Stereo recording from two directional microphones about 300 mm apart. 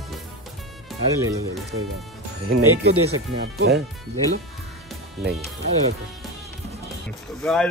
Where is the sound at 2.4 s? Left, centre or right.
Right.